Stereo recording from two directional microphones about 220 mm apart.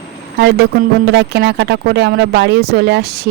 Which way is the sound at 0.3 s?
50° right (ahead or behind).